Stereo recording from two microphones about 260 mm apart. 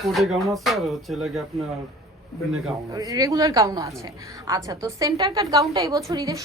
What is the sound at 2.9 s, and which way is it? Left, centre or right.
A woman's voice, centre.